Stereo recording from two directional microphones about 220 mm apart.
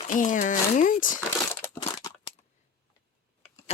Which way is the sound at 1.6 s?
15° left (ahead or behind).